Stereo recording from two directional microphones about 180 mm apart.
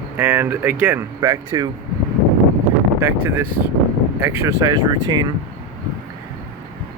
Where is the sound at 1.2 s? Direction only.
20° right (ahead or behind).